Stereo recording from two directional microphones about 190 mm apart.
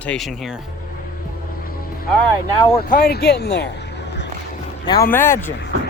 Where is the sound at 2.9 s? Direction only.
55° left (ahead or behind).